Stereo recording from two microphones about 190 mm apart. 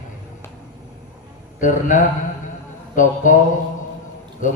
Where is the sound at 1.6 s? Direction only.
40° left (ahead or behind).